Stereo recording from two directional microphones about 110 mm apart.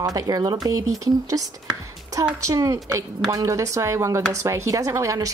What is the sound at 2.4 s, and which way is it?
A woman's voice, 30° right (ahead or behind).